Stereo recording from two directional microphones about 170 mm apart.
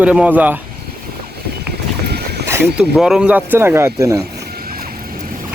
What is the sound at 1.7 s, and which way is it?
Boat, 75° right (ahead or behind).